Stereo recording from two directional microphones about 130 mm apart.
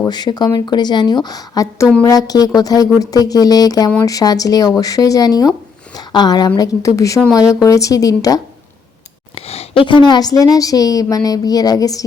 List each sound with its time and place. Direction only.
0.0 s a woman's voice: 35° left (ahead or behind)
9.3 s a sound: 50° left (ahead or behind)
9.8 s a woman's voice: 35° left (ahead or behind)